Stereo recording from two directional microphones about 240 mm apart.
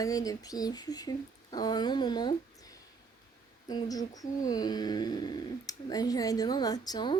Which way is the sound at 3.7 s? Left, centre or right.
Centre.